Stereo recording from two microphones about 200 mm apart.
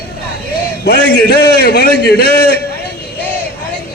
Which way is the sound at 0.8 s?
55° left (ahead or behind).